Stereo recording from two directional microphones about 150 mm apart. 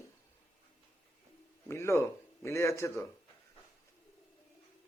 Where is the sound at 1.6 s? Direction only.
20° left (ahead or behind).